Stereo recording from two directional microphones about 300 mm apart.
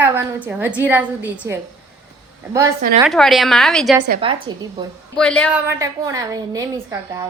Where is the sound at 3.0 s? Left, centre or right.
Centre.